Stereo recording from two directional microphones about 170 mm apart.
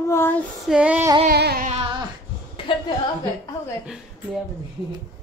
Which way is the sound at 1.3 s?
65° right (ahead or behind).